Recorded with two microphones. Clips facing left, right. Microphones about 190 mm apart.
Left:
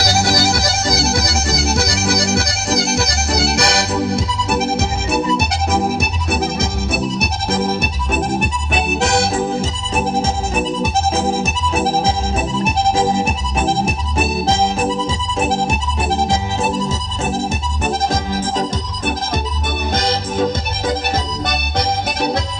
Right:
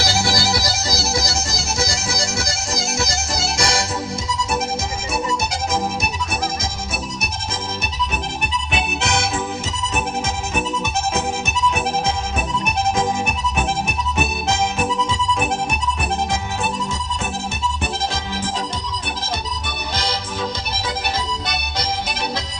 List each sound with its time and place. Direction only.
0.0 s music: 45° left (ahead or behind); by 4.6 s 60° left (ahead or behind)
5.7 s music: 60° left (ahead or behind)
8.1 s music: 45° left (ahead or behind)
12.5 s music: 30° left (ahead or behind)
20.0 s music: 50° left (ahead or behind)